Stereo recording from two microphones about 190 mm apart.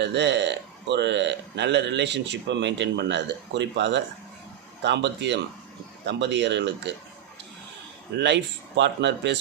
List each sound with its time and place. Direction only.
0.0 s speech: 65° right (ahead or behind)
8.2 s speech: 65° right (ahead or behind)